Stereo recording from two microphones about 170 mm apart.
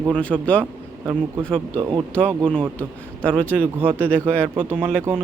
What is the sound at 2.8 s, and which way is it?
A man's voice, 5° left (ahead or behind).